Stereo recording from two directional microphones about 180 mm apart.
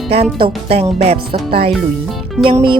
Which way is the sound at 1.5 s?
60° right (ahead or behind).